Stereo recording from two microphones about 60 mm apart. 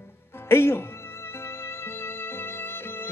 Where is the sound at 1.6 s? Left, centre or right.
Left.